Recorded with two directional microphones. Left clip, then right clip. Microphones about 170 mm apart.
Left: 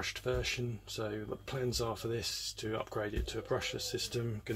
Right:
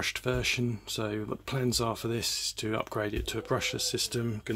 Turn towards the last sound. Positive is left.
turn(degrees=-30)  # may be behind; listen again after turning